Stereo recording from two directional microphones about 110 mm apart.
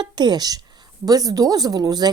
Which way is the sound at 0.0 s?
40° right (ahead or behind).